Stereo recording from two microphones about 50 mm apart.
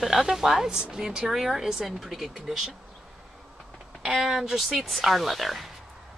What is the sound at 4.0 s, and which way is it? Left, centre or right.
Speech, centre.